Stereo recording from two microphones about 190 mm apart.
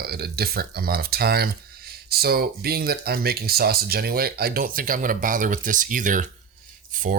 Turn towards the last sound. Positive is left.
turn(degrees=-45)  # may be behind; listen again after turning